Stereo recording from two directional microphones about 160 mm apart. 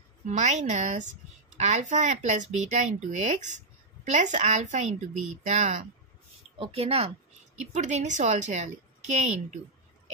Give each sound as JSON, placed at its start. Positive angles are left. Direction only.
{"t": 0.3, "sound": "speech", "side_deg": -45}
{"t": 6.6, "sound": "speech", "side_deg": -40}